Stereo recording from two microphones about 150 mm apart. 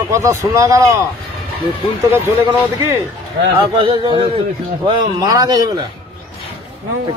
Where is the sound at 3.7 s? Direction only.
35° right (ahead or behind).